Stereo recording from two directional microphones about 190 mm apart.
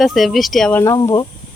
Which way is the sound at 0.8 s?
15° left (ahead or behind).